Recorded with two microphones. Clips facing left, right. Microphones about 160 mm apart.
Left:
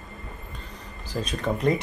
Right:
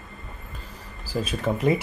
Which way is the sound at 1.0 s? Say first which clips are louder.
Right 2 dB; 5° right (ahead or behind).